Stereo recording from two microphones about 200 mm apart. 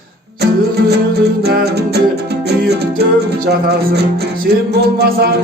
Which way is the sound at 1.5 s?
55° right (ahead or behind).